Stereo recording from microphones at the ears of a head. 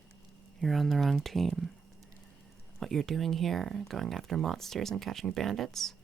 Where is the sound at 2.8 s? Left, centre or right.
Right.